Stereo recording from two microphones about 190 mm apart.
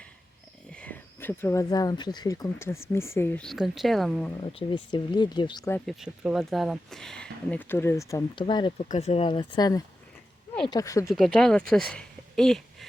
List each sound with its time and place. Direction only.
0.7 s speech: 5° left (ahead or behind)
4.4 s speech: 25° left (ahead or behind)
5.7 s speech: centre (ahead or behind); by 11.1 s 15° left (ahead or behind)
11.1 s speech: centre (ahead or behind)
11.9 s a sound: centre (ahead or behind)